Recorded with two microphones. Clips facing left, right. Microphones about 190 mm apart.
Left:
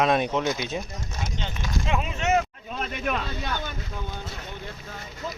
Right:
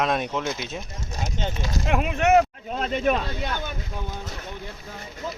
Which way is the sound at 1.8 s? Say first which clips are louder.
Right 5 dB; 60° right (ahead or behind).